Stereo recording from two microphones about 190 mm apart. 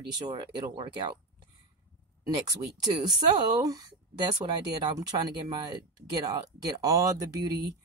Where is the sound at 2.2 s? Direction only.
20° right (ahead or behind).